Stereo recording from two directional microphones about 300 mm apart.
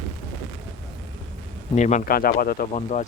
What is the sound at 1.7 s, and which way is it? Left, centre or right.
Speech, left.